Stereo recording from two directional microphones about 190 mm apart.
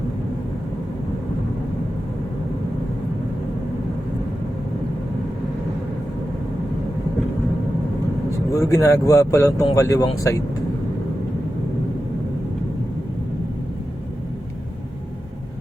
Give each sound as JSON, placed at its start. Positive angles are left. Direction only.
{"t": 8.5, "sound": "speech", "side_deg": 15}